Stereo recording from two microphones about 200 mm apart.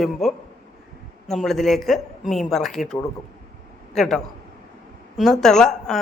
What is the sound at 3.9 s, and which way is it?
Speech, centre (ahead or behind).